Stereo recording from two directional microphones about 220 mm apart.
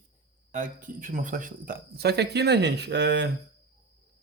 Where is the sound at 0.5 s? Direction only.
40° right (ahead or behind).